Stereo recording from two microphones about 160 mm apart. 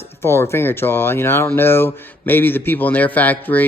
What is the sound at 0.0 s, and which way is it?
Speech, 15° left (ahead or behind).